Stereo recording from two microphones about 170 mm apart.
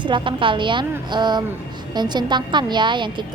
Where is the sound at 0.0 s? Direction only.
30° right (ahead or behind).